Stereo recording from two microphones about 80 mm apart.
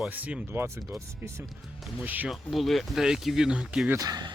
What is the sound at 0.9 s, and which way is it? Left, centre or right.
Speech, right.